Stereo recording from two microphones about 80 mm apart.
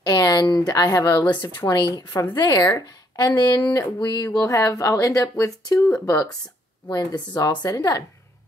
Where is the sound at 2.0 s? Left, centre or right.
Left.